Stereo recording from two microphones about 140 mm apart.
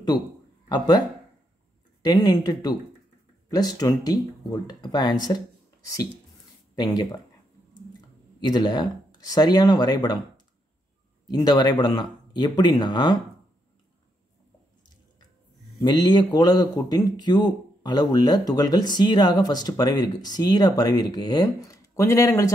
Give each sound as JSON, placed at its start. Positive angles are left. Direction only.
{"t": 0.1, "sound": "speech", "side_deg": 30}
{"t": 2.0, "sound": "speech", "side_deg": 30}
{"t": 6.7, "sound": "speech", "side_deg": 25}
{"t": 8.4, "sound": "speech", "side_deg": 30}
{"t": 11.2, "sound": "speech", "side_deg": 30}
{"t": 15.8, "sound": "speech", "side_deg": 30}